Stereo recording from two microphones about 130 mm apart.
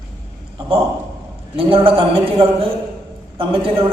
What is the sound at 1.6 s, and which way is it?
A man's voice, 40° right (ahead or behind).